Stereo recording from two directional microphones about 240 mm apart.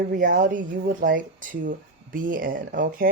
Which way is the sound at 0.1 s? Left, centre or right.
Right.